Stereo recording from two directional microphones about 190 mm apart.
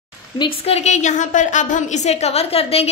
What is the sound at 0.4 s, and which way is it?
A woman's voice, 35° left (ahead or behind).